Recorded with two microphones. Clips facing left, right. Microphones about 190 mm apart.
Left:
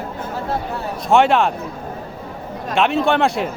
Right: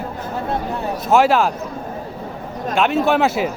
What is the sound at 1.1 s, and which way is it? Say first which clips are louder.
Speech: even; centre (ahead or behind).